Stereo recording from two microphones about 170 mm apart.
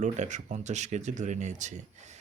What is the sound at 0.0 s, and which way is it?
Speech, 45° right (ahead or behind).